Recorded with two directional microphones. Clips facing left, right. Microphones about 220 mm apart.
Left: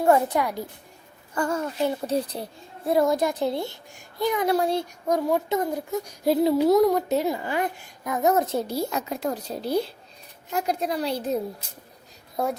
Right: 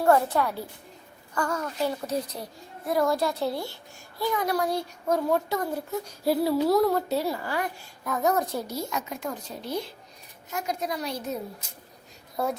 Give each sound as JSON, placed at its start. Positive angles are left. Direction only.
{"t": 0.0, "sound": "a woman's voice", "side_deg": 15}
{"t": 1.4, "sound": "a child's voice", "side_deg": 25}